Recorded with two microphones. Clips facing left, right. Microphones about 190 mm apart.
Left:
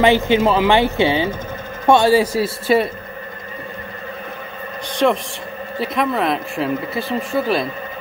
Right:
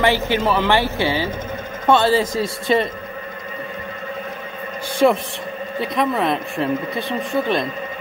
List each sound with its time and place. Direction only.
0.0 s speech: 15° left (ahead or behind)
4.9 s a man's voice: 5° right (ahead or behind)